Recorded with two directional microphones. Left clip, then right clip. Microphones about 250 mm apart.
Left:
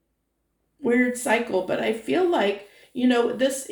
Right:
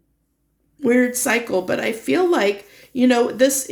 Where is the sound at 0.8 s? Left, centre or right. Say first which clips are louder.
Right 5 dB; right.